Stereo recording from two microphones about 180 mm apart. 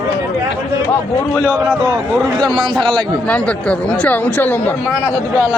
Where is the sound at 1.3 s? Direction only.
5° left (ahead or behind).